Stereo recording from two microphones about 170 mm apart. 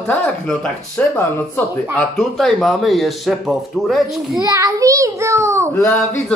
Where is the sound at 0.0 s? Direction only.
5° left (ahead or behind).